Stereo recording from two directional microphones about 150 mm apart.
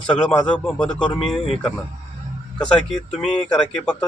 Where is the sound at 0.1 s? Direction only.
10° left (ahead or behind).